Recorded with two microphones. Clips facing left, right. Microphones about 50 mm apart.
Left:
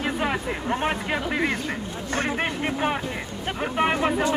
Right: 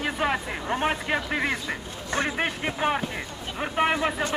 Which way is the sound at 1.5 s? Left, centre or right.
Left.